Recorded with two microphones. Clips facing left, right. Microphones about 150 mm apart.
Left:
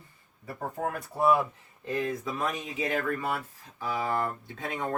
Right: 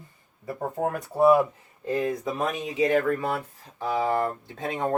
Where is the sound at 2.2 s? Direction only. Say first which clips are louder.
Right 4 dB; 35° right (ahead or behind).